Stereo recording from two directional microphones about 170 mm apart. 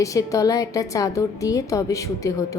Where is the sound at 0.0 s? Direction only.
20° left (ahead or behind).